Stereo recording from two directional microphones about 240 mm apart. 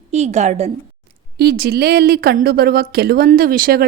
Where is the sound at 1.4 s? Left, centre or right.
Right.